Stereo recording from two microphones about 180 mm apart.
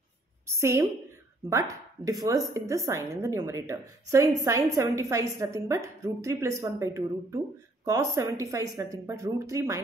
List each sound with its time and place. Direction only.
0.5 s a woman's voice: 15° right (ahead or behind)